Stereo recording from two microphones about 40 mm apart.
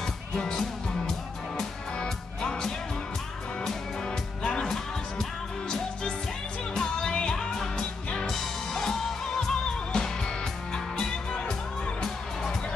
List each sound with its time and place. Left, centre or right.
0.0 s music: centre
3.6 s music: centre
6.7 s music: centre
8.3 s music: centre